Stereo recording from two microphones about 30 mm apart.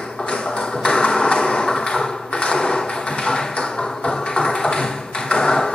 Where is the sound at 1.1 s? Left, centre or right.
Left.